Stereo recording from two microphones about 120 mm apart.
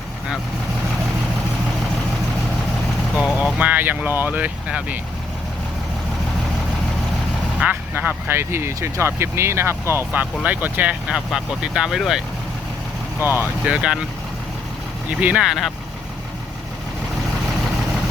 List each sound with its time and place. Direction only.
3.2 s speech: 5° right (ahead or behind)
7.6 s speech: 15° right (ahead or behind)
13.7 s speech: 5° right (ahead or behind)
15.2 s speech: 10° right (ahead or behind)